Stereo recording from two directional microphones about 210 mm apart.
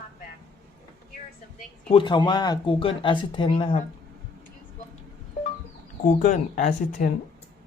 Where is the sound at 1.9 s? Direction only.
25° left (ahead or behind).